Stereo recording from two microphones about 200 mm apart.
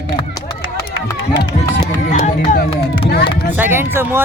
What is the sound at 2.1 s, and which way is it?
Speech, 35° left (ahead or behind).